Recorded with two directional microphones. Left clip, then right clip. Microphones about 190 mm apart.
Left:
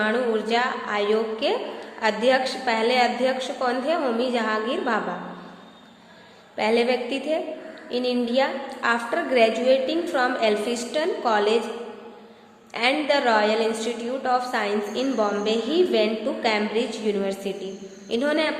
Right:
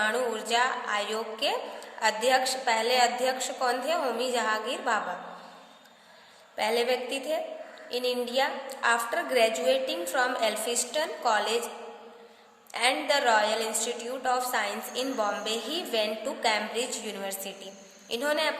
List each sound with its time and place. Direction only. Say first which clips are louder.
0.0 s a woman's voice: left 5 dB; 25° right (ahead or behind)
6.6 s a woman's voice: left 5 dB; 25° right (ahead or behind)
12.7 s a woman's voice: left 4 dB; 25° right (ahead or behind)